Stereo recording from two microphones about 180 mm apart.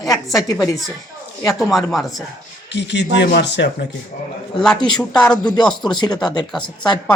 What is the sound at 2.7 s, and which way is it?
A man's voice, 75° left (ahead or behind).